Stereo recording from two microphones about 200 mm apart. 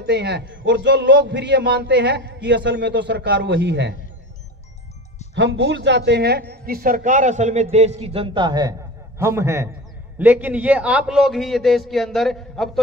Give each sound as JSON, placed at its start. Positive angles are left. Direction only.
{"t": 0.0, "sound": "a man's voice", "side_deg": -55}
{"t": 5.3, "sound": "a woman's voice", "side_deg": -65}